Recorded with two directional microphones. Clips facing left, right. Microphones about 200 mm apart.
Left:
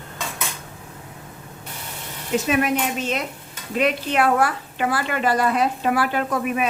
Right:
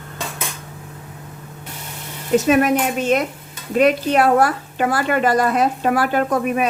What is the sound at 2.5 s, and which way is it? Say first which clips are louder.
Speech: right 4 dB; 45° right (ahead or behind).